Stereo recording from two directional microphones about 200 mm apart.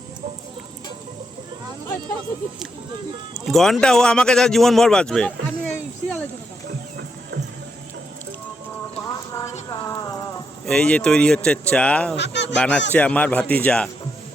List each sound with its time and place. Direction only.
3.4 s speech: centre (ahead or behind)
9.3 s horse: 15° left (ahead or behind)
10.7 s speech: 5° left (ahead or behind)
12.1 s speech: 60° left (ahead or behind)
12.5 s a man's voice: 5° left (ahead or behind)